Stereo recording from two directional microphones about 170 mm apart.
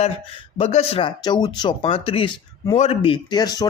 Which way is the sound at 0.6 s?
35° left (ahead or behind).